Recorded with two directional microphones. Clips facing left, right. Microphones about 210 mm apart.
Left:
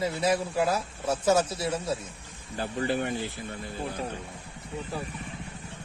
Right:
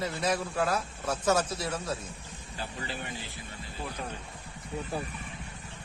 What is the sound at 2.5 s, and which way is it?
Speech, 55° left (ahead or behind).